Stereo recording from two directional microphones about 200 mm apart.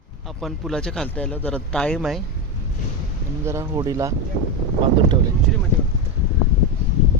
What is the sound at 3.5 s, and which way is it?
Speech, 15° right (ahead or behind).